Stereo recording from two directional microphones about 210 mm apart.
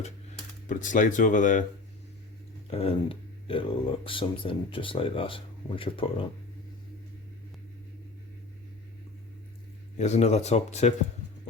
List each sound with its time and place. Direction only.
0.7 s speech: 40° left (ahead or behind)
2.6 s speech: 25° left (ahead or behind)
10.0 s speech: 30° left (ahead or behind)